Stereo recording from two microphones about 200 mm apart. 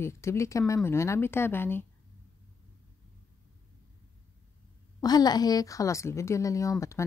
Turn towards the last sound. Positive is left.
turn(degrees=15)  # may be behind; listen again after turning